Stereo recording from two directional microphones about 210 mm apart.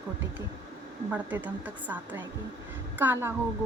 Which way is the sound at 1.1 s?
10° right (ahead or behind).